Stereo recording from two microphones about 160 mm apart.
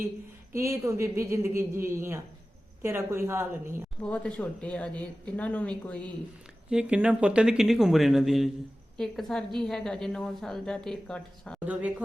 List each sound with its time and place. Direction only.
0.5 s a woman's voice: 20° right (ahead or behind)
4.0 s speech: 5° left (ahead or behind)
6.7 s a woman's voice: 5° right (ahead or behind)
11.6 s a woman's voice: 10° right (ahead or behind)